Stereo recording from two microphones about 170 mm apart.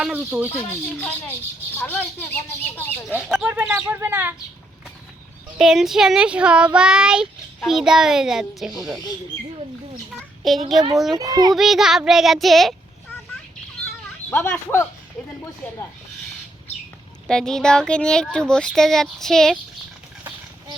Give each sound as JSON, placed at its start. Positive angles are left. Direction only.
{"t": 0.0, "sound": "speech", "side_deg": -10}
{"t": 0.5, "sound": "speech", "side_deg": 10}
{"t": 3.2, "sound": "speech", "side_deg": -5}
{"t": 5.5, "sound": "speech", "side_deg": 0}
{"t": 10.4, "sound": "speech", "side_deg": 0}
{"t": 11.2, "sound": "a child's voice", "side_deg": -20}
{"t": 11.5, "sound": "speech", "side_deg": 0}
{"t": 14.3, "sound": "speech", "side_deg": 15}
{"t": 17.2, "sound": "speech", "side_deg": 5}